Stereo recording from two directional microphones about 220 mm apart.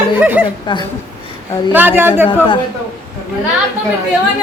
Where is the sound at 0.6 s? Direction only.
20° left (ahead or behind).